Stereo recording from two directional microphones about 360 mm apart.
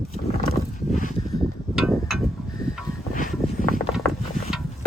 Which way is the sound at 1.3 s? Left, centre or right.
Centre.